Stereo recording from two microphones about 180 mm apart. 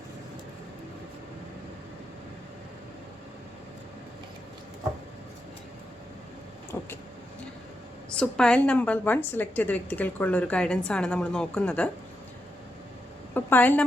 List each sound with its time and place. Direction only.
6.7 s vehicle: 15° left (ahead or behind)
8.1 s a woman's voice: 5° left (ahead or behind)
13.3 s a woman's voice: 10° left (ahead or behind)